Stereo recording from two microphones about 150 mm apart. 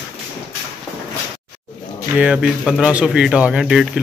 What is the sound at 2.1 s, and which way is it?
A man's voice, 5° right (ahead or behind).